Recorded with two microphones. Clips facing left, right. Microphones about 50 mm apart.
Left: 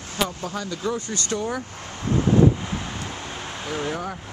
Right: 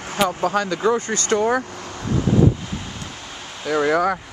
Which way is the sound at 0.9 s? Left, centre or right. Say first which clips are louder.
Right 7 dB; right.